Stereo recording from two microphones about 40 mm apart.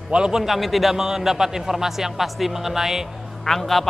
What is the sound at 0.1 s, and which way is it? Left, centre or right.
Speech, right.